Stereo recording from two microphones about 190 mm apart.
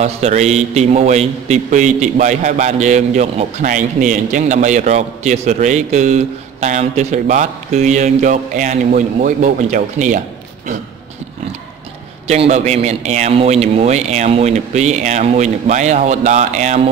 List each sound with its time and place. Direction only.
0.0 s a man's voice: 35° right (ahead or behind)
12.3 s a man's voice: 35° right (ahead or behind)